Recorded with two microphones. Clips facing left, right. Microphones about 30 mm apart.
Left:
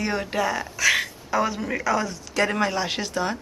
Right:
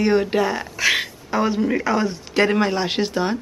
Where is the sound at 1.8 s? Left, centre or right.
Right.